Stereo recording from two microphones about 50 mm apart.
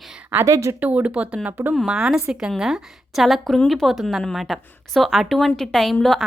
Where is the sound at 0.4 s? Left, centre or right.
Right.